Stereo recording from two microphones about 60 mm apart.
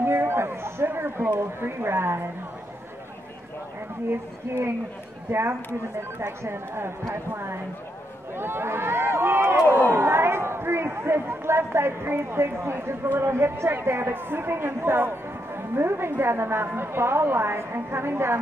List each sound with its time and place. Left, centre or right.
0.0 s a sound: right
0.8 s speech: right
4.1 s speech: right